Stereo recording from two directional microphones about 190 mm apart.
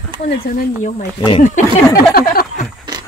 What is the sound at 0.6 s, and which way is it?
Speech, 45° left (ahead or behind).